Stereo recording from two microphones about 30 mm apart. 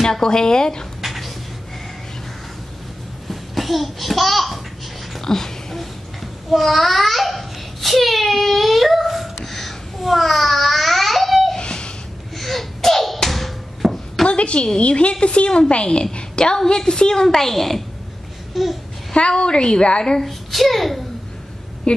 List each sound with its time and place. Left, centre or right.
0.0 s a woman's voice: left
1.0 s a sound: centre
3.3 s a child's voice: centre
5.2 s a sound: centre
6.5 s babbling: centre
11.5 s a sound: left
12.4 s sneeze: centre
13.3 s a sound: centre
14.2 s a woman's voice: left; by 17.8 s centre
18.5 s babbling: centre
19.1 s a woman's voice: left
20.2 s a child's voice: centre
21.9 s a woman's voice: left